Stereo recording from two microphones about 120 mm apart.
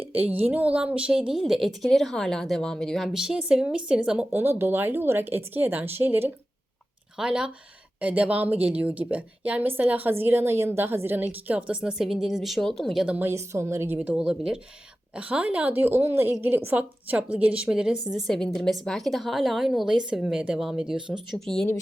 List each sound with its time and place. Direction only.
0.3 s a woman's voice: 15° right (ahead or behind)
4.4 s a woman's voice: 20° right (ahead or behind); by 13.1 s 5° right (ahead or behind)
13.1 s a woman's voice: 20° right (ahead or behind); by 21.7 s 5° left (ahead or behind)